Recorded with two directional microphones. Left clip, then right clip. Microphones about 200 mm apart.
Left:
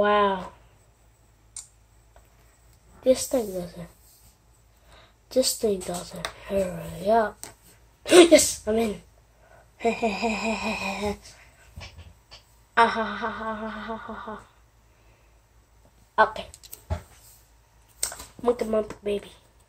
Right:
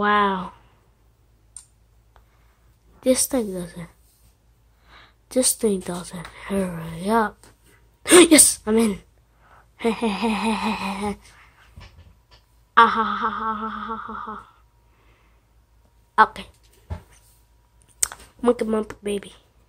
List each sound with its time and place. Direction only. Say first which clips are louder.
0.0 s a sound: right 2 dB; 45° right (ahead or behind)
3.0 s speech: right 1 dB; 50° right (ahead or behind)
4.9 s speech: right 1 dB; 45° right (ahead or behind)
9.8 s speech: right 1 dB; 35° right (ahead or behind)
12.7 s a woman's voice: right 5 dB; 35° right (ahead or behind)
16.6 s dog: left 11 dB; 25° left (ahead or behind)
18.0 s speech: right 4 dB; 55° right (ahead or behind)